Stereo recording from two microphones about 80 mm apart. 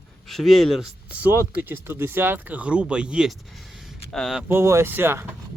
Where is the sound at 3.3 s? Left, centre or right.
Centre.